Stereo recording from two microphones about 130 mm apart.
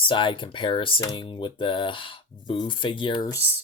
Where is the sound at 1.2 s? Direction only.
40° left (ahead or behind).